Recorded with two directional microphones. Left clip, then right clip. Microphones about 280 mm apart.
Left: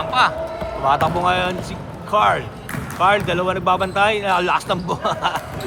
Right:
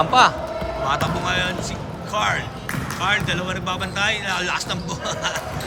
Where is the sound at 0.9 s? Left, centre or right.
Centre.